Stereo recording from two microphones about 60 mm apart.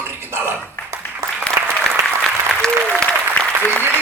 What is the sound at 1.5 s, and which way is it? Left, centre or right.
Applause, right.